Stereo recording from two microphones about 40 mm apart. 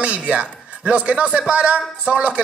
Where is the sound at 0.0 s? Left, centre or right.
Right.